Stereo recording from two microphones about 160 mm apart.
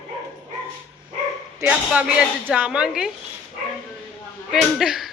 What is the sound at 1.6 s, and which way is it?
A woman's voice, 5° right (ahead or behind).